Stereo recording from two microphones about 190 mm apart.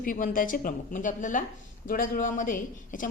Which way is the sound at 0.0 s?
45° left (ahead or behind).